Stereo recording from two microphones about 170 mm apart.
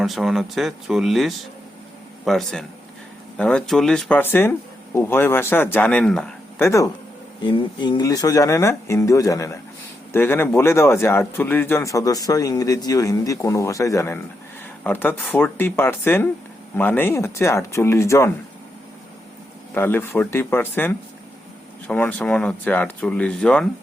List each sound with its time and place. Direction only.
0.0 s speech: centre (ahead or behind)
6.6 s speech: 15° left (ahead or behind)
7.4 s speech: 30° left (ahead or behind)
19.7 s speech: 15° left (ahead or behind)